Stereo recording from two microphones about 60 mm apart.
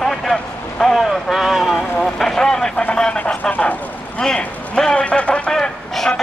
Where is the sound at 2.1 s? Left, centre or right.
Centre.